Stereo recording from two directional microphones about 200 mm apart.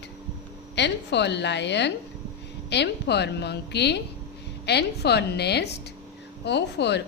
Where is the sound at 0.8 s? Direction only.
60° left (ahead or behind).